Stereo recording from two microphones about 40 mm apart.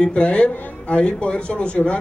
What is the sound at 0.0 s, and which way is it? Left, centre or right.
A man's voice, left.